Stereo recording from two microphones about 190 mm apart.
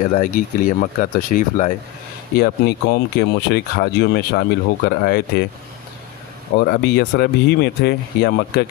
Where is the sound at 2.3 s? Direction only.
55° left (ahead or behind).